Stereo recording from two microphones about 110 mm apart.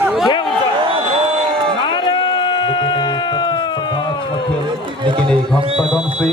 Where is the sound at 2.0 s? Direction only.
45° left (ahead or behind).